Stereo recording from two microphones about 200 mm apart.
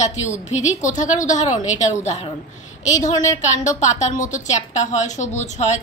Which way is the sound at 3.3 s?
35° left (ahead or behind).